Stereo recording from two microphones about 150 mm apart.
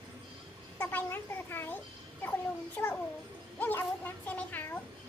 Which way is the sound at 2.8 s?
10° left (ahead or behind).